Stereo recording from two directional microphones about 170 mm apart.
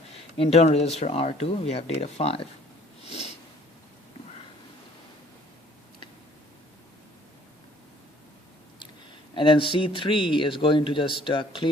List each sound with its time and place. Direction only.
0.3 s speech: 35° left (ahead or behind)
3.1 s sniff: 40° left (ahead or behind)
9.3 s a man's voice: 30° left (ahead or behind)